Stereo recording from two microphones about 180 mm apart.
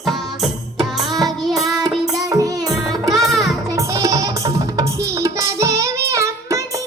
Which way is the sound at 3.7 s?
20° right (ahead or behind).